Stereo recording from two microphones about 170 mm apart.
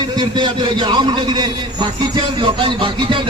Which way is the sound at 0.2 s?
25° right (ahead or behind).